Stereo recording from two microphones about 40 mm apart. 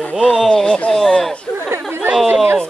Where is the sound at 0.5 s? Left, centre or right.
Centre.